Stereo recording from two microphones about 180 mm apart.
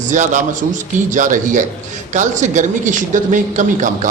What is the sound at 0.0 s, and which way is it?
A man's voice, 45° right (ahead or behind).